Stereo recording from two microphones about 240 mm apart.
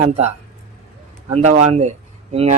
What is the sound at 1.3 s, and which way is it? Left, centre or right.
Speech, right.